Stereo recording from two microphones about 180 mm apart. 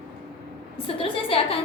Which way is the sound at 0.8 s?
30° left (ahead or behind).